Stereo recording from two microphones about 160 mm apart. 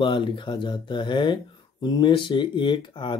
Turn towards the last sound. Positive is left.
turn(degrees=30)  # may be behind; listen again after turning